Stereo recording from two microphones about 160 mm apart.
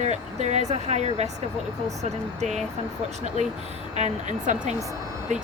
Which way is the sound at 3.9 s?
45° right (ahead or behind).